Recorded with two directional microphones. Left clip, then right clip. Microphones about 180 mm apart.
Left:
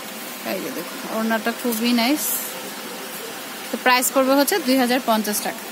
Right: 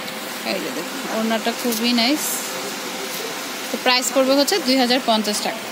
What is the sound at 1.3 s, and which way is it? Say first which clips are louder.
Speech: even; 10° left (ahead or behind).